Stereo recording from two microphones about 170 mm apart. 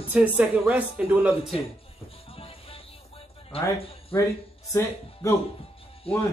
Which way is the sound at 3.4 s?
35° left (ahead or behind).